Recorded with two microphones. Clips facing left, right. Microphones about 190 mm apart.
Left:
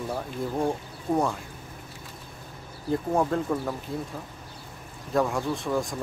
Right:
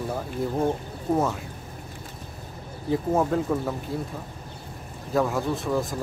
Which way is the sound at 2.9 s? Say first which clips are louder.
Right 2 dB; 5° right (ahead or behind).